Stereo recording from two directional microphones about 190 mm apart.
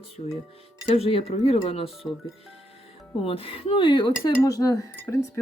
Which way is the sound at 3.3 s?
30° left (ahead or behind).